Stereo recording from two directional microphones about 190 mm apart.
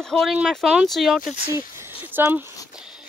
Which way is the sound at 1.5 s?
15° right (ahead or behind).